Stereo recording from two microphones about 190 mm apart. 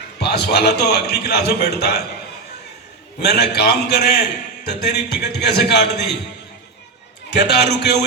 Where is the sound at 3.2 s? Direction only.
60° left (ahead or behind).